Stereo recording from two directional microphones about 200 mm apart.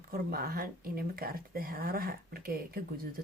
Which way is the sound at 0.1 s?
50° right (ahead or behind).